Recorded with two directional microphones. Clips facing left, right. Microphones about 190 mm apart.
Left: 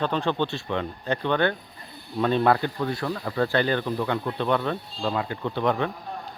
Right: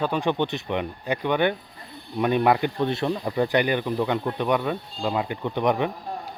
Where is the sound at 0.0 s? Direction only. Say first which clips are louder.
Right 1 dB; 15° right (ahead or behind).